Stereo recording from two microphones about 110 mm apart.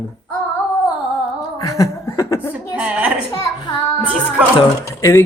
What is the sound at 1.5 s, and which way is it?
Speech, 30° left (ahead or behind).